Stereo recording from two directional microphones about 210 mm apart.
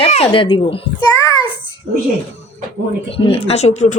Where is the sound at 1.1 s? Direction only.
15° left (ahead or behind).